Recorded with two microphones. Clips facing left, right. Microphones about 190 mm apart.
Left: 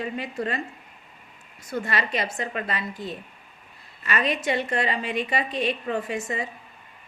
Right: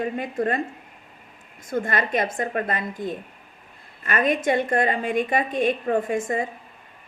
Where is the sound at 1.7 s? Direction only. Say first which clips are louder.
Right 3 dB; 50° right (ahead or behind).